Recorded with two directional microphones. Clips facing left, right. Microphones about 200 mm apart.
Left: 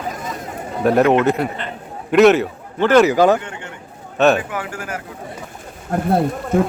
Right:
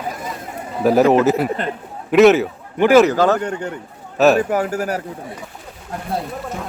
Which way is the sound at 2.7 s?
15° right (ahead or behind).